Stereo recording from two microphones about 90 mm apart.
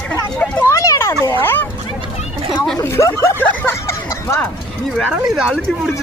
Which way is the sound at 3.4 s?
30° left (ahead or behind).